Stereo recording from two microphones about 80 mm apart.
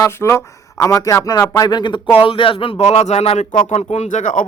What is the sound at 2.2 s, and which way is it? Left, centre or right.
Speech, left.